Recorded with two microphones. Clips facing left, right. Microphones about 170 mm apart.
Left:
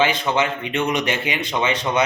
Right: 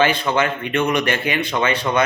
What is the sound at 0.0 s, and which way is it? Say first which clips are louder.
Speech: right 1 dB; 20° left (ahead or behind).